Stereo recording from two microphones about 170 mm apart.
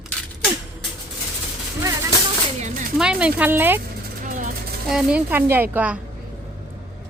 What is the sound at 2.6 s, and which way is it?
Speech, 50° right (ahead or behind).